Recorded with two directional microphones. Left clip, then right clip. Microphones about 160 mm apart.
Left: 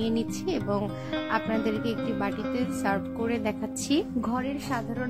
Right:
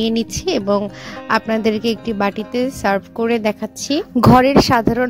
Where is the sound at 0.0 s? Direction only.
60° right (ahead or behind).